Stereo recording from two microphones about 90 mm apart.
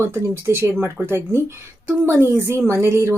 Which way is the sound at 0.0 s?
30° right (ahead or behind).